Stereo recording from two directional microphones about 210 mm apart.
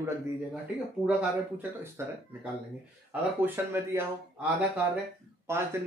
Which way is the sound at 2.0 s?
15° right (ahead or behind).